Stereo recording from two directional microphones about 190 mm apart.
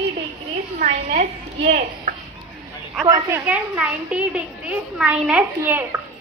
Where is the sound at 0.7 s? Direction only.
40° right (ahead or behind).